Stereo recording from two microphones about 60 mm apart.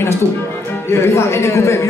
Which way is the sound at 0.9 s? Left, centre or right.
Left.